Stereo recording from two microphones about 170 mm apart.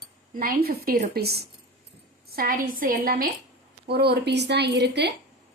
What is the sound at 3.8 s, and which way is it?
A woman's voice, 70° right (ahead or behind).